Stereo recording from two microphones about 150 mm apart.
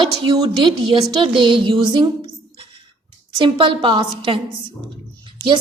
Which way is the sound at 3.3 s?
30° right (ahead or behind).